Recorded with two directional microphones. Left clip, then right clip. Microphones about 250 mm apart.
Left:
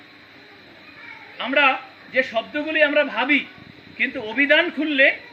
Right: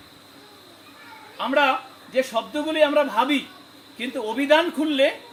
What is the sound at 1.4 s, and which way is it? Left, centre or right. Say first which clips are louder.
A man's voice: left 2 dB; centre.